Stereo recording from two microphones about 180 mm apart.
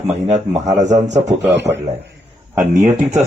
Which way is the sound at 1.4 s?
75° right (ahead or behind).